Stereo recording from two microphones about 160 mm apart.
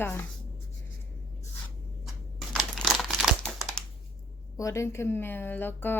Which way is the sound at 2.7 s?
Centre (ahead or behind).